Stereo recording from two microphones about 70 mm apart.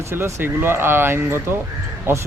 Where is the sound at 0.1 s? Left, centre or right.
Right.